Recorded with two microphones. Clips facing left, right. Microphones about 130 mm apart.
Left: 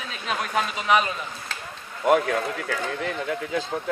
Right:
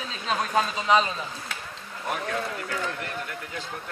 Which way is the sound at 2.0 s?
90° left.